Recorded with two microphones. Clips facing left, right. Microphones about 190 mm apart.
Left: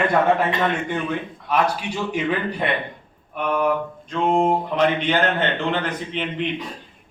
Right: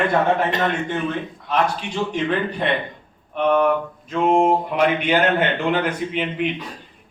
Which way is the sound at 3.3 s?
Centre (ahead or behind).